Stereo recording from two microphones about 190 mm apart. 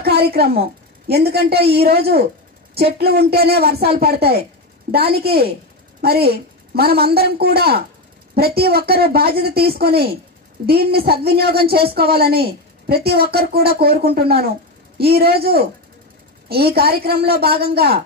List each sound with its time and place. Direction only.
0.0 s a woman's voice: 55° right (ahead or behind)